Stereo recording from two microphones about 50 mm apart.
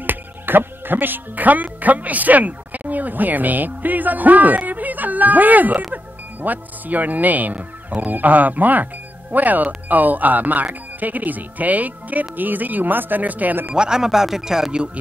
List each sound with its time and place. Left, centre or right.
0.0 s speech: right
13.7 s speech: centre